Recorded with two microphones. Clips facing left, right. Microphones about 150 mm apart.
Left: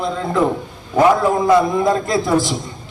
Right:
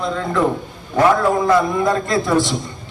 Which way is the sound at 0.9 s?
20° left (ahead or behind).